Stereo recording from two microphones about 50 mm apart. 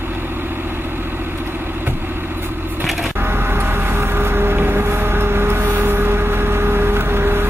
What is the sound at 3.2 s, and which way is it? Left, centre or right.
Vehicle, right.